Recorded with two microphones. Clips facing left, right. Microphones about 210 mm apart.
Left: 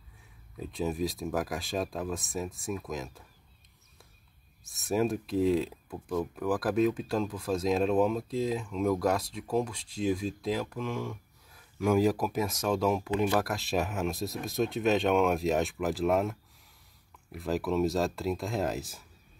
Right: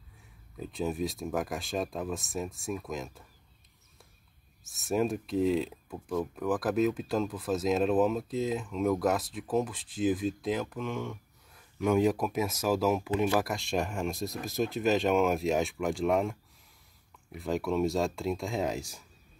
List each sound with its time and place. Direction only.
0.6 s speech: centre (ahead or behind)
4.6 s speech: centre (ahead or behind)